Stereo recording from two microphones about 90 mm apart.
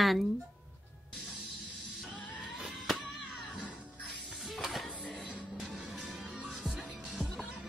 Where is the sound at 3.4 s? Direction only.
15° left (ahead or behind).